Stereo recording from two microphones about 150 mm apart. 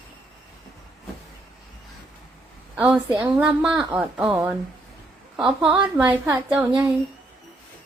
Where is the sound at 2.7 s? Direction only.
10° right (ahead or behind).